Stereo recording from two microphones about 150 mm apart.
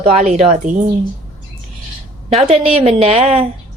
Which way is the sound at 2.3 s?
45° right (ahead or behind).